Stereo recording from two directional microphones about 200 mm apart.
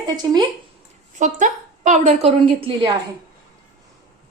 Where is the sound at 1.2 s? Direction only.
40° right (ahead or behind).